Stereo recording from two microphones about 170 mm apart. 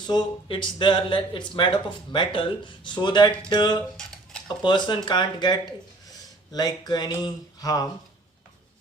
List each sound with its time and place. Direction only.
0.1 s speech: 25° left (ahead or behind)
3.9 s dishes: 5° left (ahead or behind)
4.4 s speech: 25° left (ahead or behind)